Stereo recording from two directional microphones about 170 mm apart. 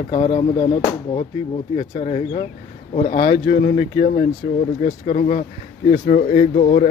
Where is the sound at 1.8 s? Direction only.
40° left (ahead or behind).